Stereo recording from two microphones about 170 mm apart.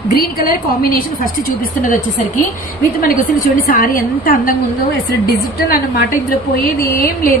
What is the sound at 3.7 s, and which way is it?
A woman's voice, 55° left (ahead or behind).